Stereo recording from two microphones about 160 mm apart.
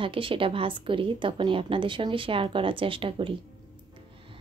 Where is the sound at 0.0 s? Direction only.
35° right (ahead or behind).